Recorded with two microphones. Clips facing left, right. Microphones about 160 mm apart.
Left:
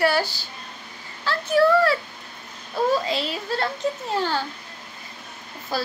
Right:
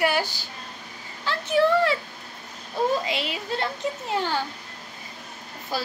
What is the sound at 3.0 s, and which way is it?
Speech, 15° right (ahead or behind).